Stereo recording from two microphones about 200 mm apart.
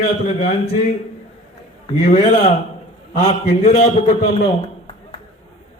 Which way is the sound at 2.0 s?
35° left (ahead or behind).